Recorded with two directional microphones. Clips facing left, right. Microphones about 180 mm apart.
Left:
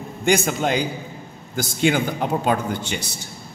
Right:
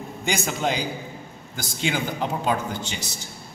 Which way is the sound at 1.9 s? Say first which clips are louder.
Left 4 dB; 55° left (ahead or behind).